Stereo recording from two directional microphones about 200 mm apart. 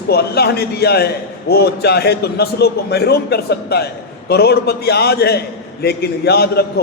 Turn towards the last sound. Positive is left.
turn(degrees=55)  # may be behind; listen again after turning